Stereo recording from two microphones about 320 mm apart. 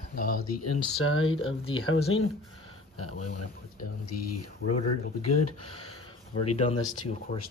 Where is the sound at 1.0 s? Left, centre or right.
Left.